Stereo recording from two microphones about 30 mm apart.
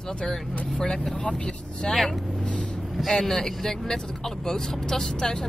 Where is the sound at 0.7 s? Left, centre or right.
Left.